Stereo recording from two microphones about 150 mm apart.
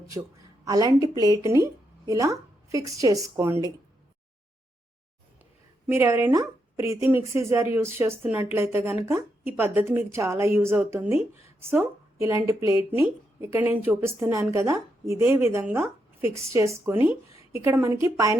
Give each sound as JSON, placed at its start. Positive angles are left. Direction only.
{"t": 0.6, "sound": "speech", "side_deg": -25}
{"t": 5.9, "sound": "a woman's voice", "side_deg": -15}